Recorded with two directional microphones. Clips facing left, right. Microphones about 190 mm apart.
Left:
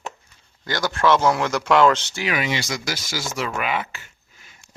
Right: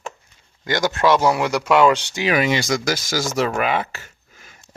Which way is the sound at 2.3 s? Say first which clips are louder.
Right 6 dB; 45° right (ahead or behind).